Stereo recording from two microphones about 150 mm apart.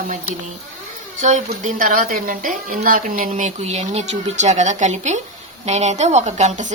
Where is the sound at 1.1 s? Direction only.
50° right (ahead or behind).